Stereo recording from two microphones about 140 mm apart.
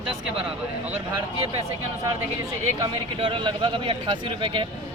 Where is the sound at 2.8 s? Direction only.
35° right (ahead or behind).